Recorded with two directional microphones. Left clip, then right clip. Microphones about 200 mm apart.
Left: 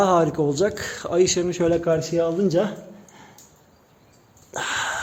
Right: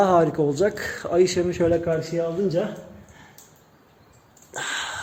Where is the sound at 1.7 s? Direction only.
25° left (ahead or behind).